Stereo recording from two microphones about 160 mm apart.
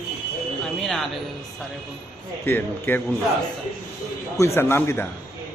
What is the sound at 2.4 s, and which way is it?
Speech, 10° left (ahead or behind).